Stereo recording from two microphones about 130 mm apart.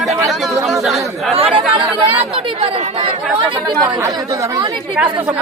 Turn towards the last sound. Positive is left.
turn(degrees=-10)  # may be behind; listen again after turning